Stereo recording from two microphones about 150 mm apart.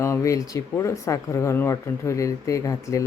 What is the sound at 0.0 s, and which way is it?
Speech, 20° left (ahead or behind).